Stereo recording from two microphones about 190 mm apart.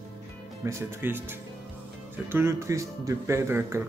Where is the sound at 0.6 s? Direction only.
10° right (ahead or behind).